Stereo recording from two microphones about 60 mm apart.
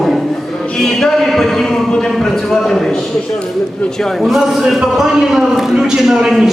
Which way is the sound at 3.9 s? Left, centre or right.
Centre.